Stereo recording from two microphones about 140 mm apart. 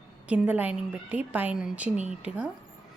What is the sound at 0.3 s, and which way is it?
A woman's voice, 10° right (ahead or behind).